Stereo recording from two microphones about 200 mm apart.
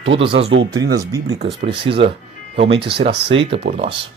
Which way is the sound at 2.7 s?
55° right (ahead or behind).